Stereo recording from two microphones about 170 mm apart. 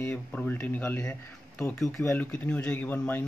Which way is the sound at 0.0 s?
10° left (ahead or behind).